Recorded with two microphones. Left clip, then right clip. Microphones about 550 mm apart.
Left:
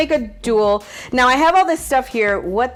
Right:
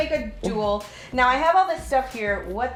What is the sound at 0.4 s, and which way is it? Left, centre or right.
A woman's voice, left.